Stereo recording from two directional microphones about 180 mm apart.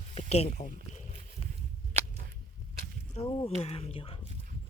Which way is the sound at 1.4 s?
30° left (ahead or behind).